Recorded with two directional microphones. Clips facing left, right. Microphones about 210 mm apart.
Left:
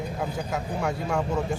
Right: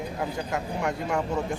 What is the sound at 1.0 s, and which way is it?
Speech, 5° right (ahead or behind).